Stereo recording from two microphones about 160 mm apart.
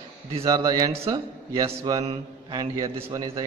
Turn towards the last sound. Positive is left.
turn(degrees=-25)  # may be behind; listen again after turning